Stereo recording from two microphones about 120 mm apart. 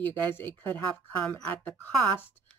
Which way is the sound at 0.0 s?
15° left (ahead or behind).